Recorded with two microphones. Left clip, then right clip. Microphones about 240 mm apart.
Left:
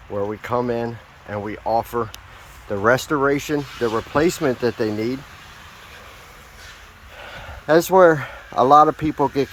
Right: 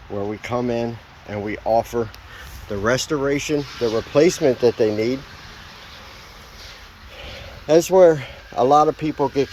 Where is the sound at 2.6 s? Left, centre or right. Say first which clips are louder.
Left 3 dB; centre.